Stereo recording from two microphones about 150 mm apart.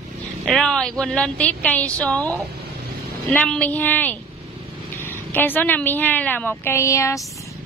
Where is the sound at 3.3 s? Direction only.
10° left (ahead or behind).